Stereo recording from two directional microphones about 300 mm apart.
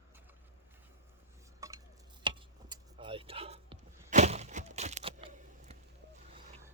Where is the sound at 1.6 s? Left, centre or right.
Centre.